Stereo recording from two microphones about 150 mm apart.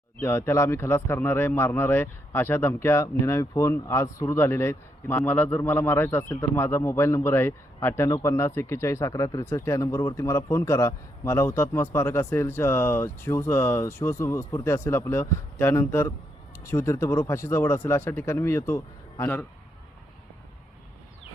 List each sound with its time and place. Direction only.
0.2 s speech: 15° left (ahead or behind)